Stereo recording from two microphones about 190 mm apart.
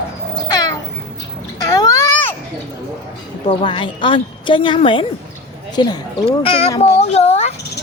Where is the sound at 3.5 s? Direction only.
25° left (ahead or behind).